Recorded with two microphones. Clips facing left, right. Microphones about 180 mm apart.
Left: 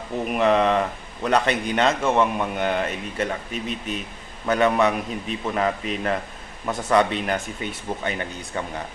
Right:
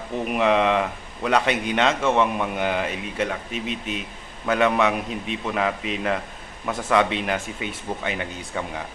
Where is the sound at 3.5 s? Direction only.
45° left (ahead or behind).